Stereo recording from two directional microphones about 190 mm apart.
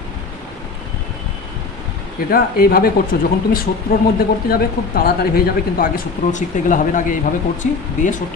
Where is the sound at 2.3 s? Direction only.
50° left (ahead or behind).